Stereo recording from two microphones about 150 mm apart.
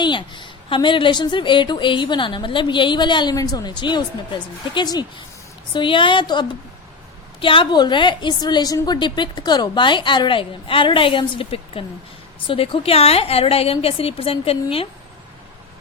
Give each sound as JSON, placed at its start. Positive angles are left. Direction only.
{"t": 0.0, "sound": "a woman's voice", "side_deg": 30}